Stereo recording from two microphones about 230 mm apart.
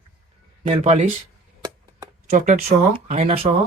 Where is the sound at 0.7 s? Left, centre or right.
Right.